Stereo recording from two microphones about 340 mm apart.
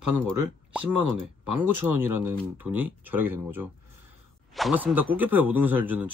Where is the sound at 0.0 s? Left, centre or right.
Right.